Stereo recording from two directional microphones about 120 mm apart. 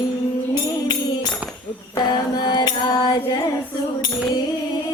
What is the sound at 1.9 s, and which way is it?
Music, 35° left (ahead or behind).